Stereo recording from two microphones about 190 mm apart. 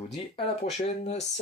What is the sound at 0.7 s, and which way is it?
Speech, 35° left (ahead or behind).